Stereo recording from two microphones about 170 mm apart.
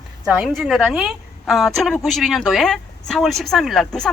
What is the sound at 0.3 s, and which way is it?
A woman's voice, 5° right (ahead or behind).